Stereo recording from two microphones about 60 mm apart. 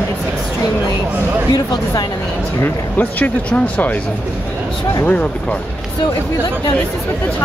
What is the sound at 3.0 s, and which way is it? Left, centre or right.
Speech, left.